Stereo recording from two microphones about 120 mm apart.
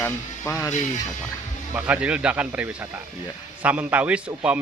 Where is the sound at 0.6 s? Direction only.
25° left (ahead or behind).